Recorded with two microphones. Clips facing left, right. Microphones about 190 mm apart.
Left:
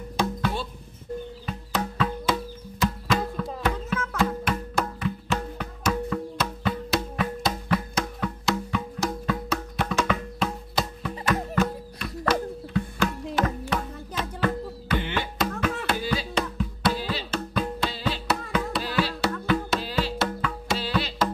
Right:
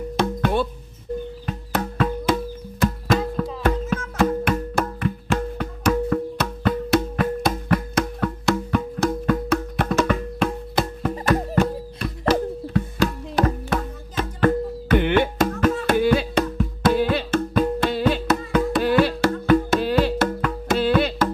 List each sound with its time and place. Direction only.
0.2 s music: 55° right (ahead or behind)
11.3 s music: 30° right (ahead or behind); by 21.3 s 55° right (ahead or behind)